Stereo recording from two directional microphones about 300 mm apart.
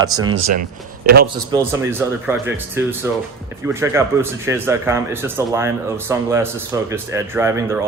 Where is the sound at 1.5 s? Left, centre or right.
Centre.